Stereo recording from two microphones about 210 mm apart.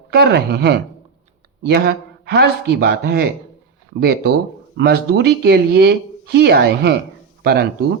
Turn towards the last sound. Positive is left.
turn(degrees=-50)  # may be behind; listen again after turning